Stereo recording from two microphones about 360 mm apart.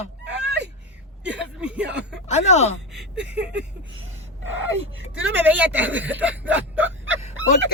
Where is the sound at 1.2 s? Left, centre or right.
Right.